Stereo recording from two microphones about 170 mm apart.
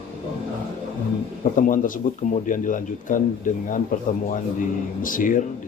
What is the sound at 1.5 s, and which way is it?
Speech, 50° left (ahead or behind).